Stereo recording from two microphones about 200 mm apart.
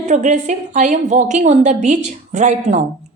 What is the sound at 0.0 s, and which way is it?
A woman's voice, 35° right (ahead or behind).